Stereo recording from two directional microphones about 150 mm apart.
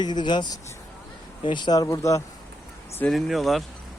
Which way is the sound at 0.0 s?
30° left (ahead or behind).